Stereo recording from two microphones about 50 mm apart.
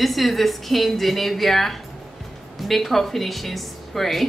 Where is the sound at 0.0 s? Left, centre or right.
Centre.